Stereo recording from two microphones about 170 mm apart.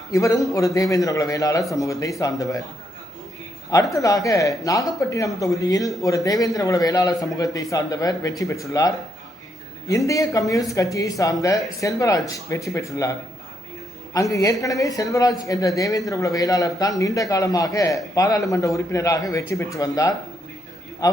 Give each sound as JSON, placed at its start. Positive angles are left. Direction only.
{"t": 0.1, "sound": "speech", "side_deg": 20}
{"t": 3.9, "sound": "speech", "side_deg": 20}
{"t": 10.1, "sound": "speech", "side_deg": 20}
{"t": 14.1, "sound": "a man's voice", "side_deg": 20}